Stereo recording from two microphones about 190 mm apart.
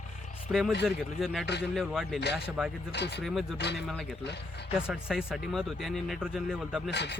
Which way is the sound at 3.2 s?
Centre (ahead or behind).